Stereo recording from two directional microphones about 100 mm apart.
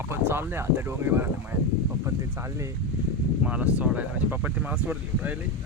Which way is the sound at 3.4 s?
15° right (ahead or behind).